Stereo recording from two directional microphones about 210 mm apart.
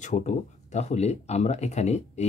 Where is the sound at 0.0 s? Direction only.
35° left (ahead or behind).